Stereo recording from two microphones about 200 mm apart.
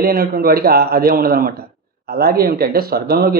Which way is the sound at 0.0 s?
45° right (ahead or behind).